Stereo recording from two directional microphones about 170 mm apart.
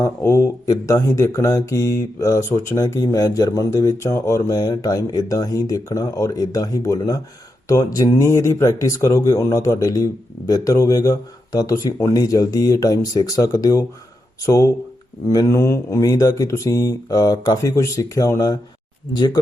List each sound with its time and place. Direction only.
0.0 s speech: 15° left (ahead or behind)